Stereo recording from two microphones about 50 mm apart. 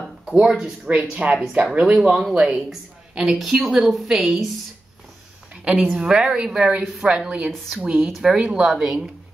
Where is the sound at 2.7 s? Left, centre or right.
Centre.